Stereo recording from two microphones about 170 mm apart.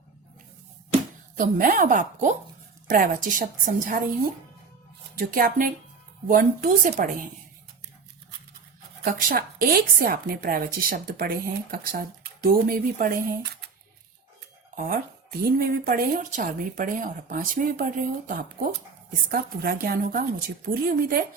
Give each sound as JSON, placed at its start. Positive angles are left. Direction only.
{"t": 1.4, "sound": "speech", "side_deg": -55}
{"t": 5.1, "sound": "a woman's voice", "side_deg": -60}
{"t": 9.0, "sound": "a woman's voice", "side_deg": -55}
{"t": 14.8, "sound": "speech", "side_deg": -60}
{"t": 19.3, "sound": "a woman's voice", "side_deg": -65}